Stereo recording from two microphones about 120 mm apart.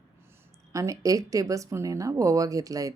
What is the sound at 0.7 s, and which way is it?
Speech, 30° right (ahead or behind).